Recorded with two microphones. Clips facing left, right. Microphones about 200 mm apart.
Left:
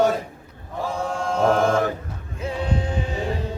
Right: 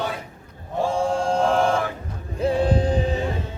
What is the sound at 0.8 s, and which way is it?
Mantra, 30° right (ahead or behind).